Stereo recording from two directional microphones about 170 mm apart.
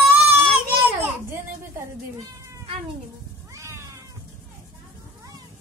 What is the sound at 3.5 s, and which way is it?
Cat, 15° right (ahead or behind).